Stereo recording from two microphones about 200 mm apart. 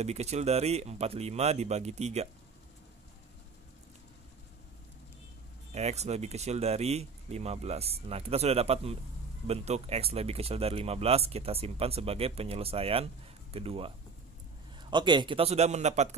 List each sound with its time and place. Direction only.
0.0 s speech: 35° right (ahead or behind)
5.7 s speech: 35° right (ahead or behind)